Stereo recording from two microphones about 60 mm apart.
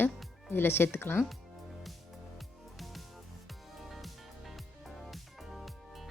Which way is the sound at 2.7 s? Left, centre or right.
Centre.